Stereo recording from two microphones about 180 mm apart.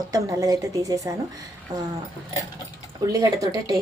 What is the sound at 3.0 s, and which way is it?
Speech, 20° right (ahead or behind).